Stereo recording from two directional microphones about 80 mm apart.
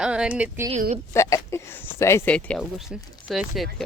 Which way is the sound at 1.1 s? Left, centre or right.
Left.